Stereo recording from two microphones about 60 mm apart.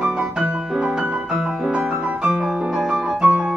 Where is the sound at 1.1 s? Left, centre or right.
Centre.